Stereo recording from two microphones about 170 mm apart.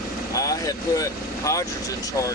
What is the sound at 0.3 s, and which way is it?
Vehicle, 20° left (ahead or behind).